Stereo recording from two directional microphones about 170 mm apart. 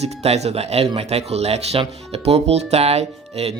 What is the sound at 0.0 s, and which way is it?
Speech, 40° right (ahead or behind).